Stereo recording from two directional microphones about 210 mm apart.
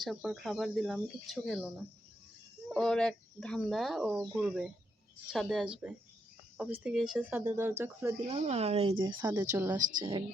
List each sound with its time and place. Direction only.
0.0 s speech: centre (ahead or behind)
8.3 s speech: 30° right (ahead or behind)
9.0 s speech: 15° right (ahead or behind)
10.0 s speech: 20° right (ahead or behind)